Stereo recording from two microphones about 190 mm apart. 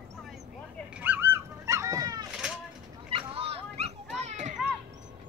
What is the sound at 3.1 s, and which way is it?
Children playing, 30° right (ahead or behind).